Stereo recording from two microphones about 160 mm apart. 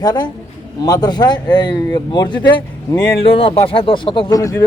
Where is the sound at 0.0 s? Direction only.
25° left (ahead or behind).